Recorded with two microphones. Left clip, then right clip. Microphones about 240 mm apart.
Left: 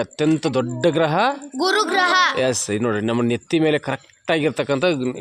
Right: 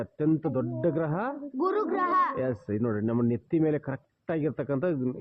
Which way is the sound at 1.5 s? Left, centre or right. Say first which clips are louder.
Left 6 dB; left.